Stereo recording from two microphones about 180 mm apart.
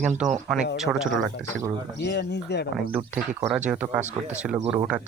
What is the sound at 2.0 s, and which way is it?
Speech, 70° left (ahead or behind).